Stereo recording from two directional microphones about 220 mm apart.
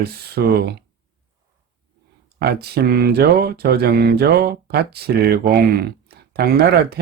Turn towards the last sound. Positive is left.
turn(degrees=-45)  # may be behind; listen again after turning